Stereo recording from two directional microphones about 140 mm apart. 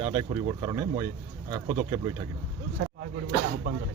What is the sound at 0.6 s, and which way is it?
Speech, 30° right (ahead or behind).